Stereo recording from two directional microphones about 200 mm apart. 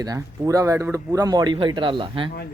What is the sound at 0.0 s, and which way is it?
Speech, 15° right (ahead or behind).